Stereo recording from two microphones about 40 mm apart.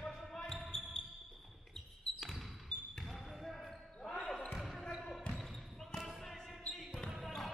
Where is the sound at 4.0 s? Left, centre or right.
Left.